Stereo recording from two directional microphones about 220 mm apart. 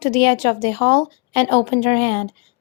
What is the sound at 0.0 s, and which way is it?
A woman's voice, 30° left (ahead or behind).